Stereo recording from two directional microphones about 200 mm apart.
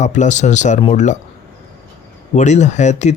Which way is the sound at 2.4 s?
35° left (ahead or behind).